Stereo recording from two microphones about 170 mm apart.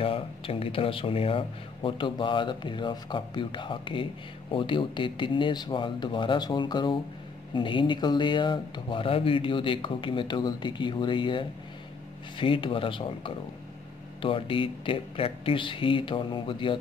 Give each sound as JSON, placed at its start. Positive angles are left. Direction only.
{"t": 0.0, "sound": "speech", "side_deg": 35}